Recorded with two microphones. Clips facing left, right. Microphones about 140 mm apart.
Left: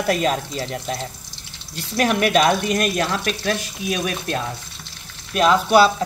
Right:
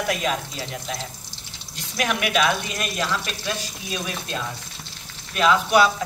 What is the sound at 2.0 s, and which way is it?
Speech, 40° left (ahead or behind).